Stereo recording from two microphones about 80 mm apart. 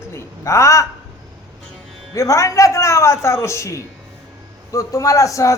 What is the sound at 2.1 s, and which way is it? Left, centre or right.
A woman's voice, left.